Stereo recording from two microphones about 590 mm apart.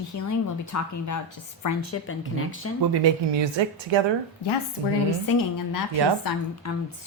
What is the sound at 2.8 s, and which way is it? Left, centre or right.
Speech, right.